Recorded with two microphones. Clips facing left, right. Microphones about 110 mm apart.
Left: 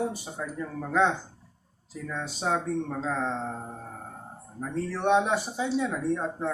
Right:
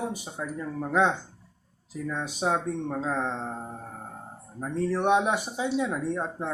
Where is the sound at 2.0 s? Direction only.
15° right (ahead or behind).